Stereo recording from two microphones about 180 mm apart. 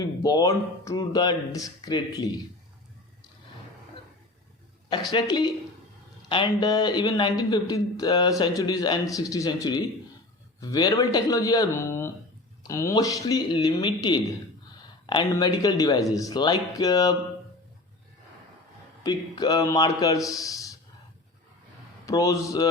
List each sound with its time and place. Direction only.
0.2 s speech: 20° left (ahead or behind)
5.1 s speech: 25° left (ahead or behind)
19.0 s speech: 20° left (ahead or behind)
22.0 s speech: 20° left (ahead or behind)